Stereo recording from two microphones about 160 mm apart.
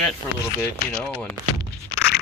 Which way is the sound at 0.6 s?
10° left (ahead or behind).